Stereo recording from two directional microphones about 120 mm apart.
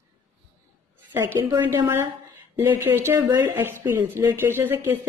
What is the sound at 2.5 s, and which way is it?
A woman's voice, 20° right (ahead or behind).